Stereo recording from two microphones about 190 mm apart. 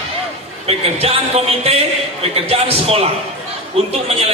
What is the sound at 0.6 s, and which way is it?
A man's voice, 30° right (ahead or behind).